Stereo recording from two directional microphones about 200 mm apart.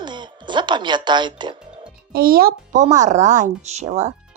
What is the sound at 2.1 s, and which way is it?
Speech, 50° right (ahead or behind).